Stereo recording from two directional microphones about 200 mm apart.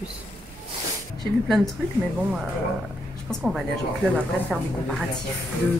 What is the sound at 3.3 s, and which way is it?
A woman's voice, centre (ahead or behind).